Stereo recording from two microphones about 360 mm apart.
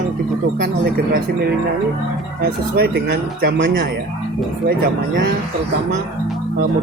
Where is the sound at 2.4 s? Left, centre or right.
Right.